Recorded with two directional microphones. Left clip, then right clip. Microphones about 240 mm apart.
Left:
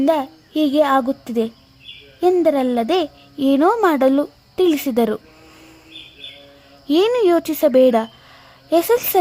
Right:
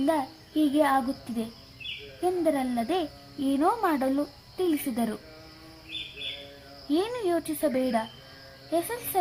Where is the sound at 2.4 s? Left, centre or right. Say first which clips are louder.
Left 10 dB; left.